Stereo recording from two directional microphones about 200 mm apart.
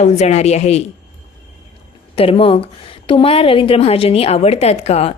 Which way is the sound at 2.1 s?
30° left (ahead or behind).